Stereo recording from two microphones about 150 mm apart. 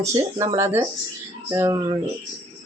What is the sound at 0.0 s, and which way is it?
Speech, 20° right (ahead or behind).